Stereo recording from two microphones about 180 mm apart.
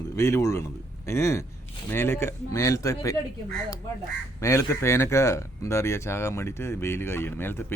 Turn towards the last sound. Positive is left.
turn(degrees=10)  # may be behind; listen again after turning